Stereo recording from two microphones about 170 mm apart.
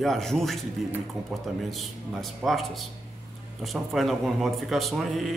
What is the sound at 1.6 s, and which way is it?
Speech, centre (ahead or behind).